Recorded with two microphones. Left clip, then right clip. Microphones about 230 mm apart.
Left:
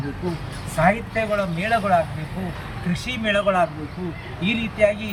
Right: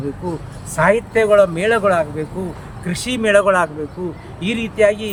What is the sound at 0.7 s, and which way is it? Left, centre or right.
Speech, centre.